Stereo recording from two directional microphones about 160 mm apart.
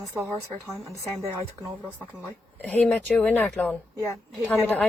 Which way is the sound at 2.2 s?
10° left (ahead or behind).